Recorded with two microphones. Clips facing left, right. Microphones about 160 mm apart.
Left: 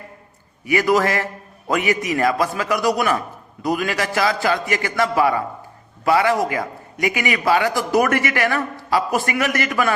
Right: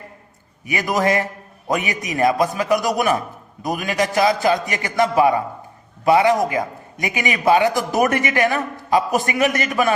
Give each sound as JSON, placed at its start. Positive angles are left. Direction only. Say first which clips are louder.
{"t": 0.7, "sound": "a man's voice", "louder": "left 2 dB", "side_deg": -20}